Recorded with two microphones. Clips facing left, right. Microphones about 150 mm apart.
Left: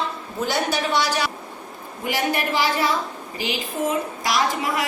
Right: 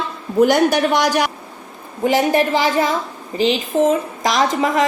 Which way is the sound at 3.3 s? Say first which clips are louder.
Right 11 dB; 20° right (ahead or behind).